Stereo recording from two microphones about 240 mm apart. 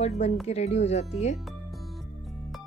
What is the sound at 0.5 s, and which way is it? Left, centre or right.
Speech, left.